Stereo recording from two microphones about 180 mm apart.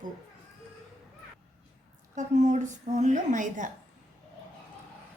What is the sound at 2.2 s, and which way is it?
A woman's voice, 45° right (ahead or behind).